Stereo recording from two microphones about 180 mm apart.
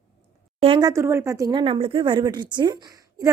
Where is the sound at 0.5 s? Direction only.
30° right (ahead or behind).